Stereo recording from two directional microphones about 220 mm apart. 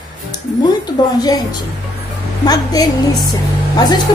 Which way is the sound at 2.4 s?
15° left (ahead or behind).